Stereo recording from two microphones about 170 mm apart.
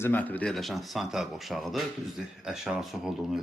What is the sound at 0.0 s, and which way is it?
Speech, 10° left (ahead or behind).